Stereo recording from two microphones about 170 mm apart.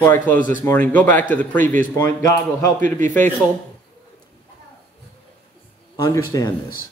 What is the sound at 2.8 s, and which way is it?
Speech, 45° right (ahead or behind).